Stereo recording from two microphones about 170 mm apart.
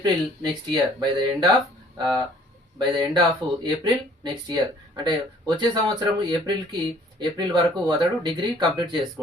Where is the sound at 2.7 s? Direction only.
25° right (ahead or behind).